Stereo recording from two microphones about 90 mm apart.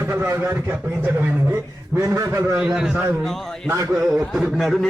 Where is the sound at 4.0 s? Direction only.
10° right (ahead or behind).